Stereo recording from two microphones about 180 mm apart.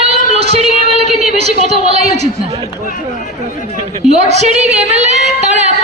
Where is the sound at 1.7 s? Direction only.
35° right (ahead or behind).